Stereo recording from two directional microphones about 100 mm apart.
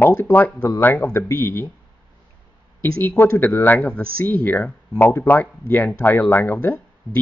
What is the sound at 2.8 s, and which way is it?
Speech, 20° left (ahead or behind).